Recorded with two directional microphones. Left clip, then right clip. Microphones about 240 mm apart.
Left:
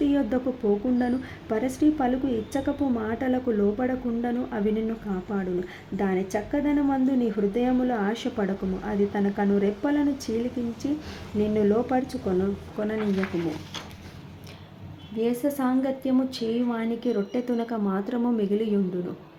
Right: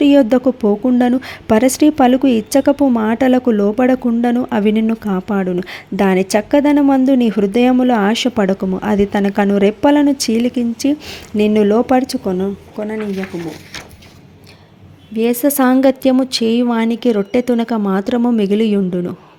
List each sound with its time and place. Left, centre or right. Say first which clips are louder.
0.0 s a woman's voice: right 14 dB; right
12.8 s speech: right 7 dB; right
15.2 s a woman's voice: right 12 dB; right